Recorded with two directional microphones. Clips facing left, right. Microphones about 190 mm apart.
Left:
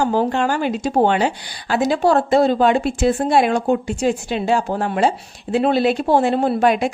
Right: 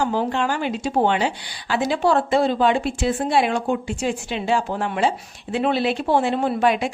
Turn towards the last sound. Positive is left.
turn(degrees=45)  # may be behind; listen again after turning